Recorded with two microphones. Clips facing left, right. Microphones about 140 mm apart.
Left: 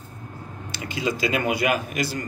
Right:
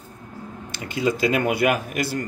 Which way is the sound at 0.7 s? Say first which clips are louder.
Right 3 dB; 55° right (ahead or behind).